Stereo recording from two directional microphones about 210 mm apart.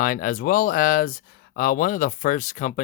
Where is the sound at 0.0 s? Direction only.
40° left (ahead or behind).